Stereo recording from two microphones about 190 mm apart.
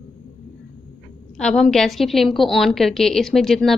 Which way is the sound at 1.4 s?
5° left (ahead or behind).